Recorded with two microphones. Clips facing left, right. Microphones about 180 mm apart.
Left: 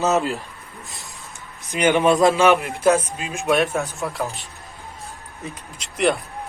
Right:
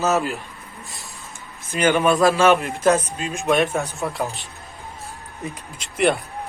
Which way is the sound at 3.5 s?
Centre (ahead or behind).